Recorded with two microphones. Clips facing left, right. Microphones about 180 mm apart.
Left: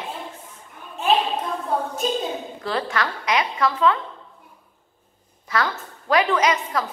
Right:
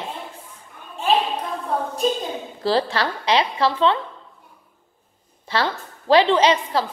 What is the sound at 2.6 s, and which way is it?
A woman's voice, 30° right (ahead or behind).